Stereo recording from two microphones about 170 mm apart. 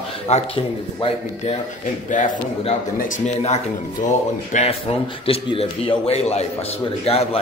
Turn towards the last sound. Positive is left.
turn(degrees=35)  # may be behind; listen again after turning